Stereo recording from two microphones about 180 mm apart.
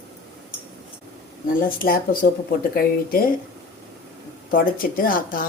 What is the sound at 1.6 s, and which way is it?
A woman's voice, 55° left (ahead or behind).